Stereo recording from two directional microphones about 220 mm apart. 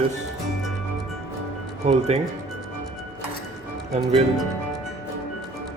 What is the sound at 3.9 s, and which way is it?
Dishes, 30° right (ahead or behind).